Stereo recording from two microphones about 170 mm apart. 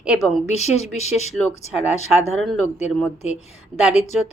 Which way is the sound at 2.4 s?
Centre (ahead or behind).